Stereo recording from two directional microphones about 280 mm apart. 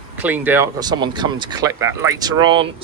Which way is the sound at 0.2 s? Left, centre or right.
Centre.